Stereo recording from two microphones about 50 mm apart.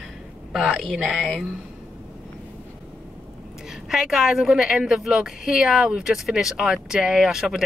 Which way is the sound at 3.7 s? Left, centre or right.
Centre.